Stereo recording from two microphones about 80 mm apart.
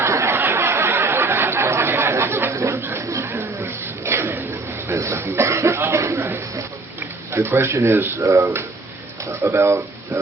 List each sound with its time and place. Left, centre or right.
0.0 s a sound: right
4.9 s cough: right
7.3 s speech: right